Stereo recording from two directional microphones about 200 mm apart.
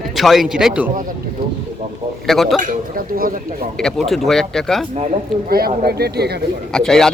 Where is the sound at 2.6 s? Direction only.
45° right (ahead or behind).